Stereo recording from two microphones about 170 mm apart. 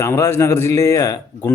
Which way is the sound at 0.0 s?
15° left (ahead or behind).